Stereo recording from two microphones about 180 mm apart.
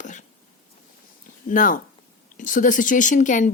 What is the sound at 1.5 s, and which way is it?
Speech, 50° left (ahead or behind).